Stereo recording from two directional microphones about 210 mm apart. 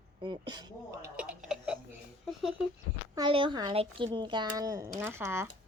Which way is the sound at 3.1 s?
25° right (ahead or behind).